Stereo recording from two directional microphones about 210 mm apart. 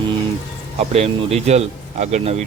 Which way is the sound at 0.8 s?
30° right (ahead or behind).